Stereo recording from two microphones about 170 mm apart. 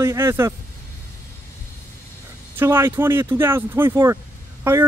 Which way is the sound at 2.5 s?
15° right (ahead or behind).